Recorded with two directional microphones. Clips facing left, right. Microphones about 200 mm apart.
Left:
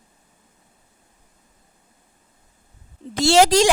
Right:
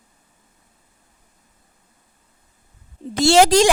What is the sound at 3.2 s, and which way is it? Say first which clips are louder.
Speech: right 2 dB; 50° right (ahead or behind).